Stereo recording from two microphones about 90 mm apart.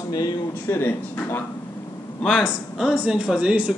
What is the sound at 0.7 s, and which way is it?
Speech, 20° left (ahead or behind).